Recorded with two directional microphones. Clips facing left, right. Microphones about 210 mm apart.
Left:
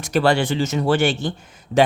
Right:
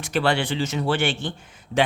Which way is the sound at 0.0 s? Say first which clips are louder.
Left 4 dB; 40° left (ahead or behind).